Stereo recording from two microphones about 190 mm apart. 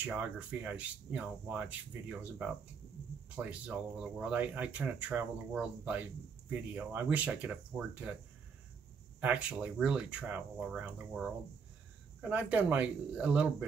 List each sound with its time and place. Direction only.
0.0 s speech: 10° right (ahead or behind)
9.2 s speech: 5° right (ahead or behind)